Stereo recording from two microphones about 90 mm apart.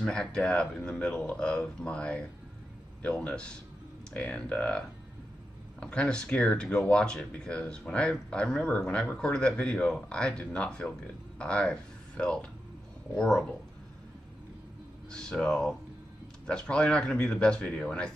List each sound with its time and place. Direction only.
0.0 s speech: 10° left (ahead or behind)
15.0 s speech: 10° left (ahead or behind)